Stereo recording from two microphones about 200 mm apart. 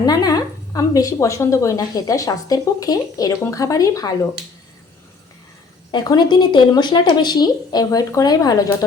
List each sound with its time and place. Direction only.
0.0 s a woman's voice: 20° left (ahead or behind)
5.9 s speech: 20° left (ahead or behind)